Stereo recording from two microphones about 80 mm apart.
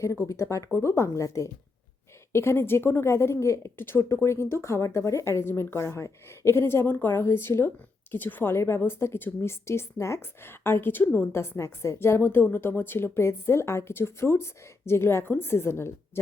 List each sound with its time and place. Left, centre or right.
0.0 s a woman's voice: left